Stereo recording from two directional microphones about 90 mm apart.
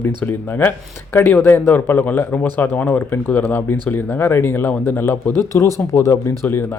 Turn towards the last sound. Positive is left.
turn(degrees=25)  # may be behind; listen again after turning